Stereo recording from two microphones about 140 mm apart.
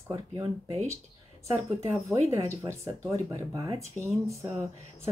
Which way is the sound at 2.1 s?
20° right (ahead or behind).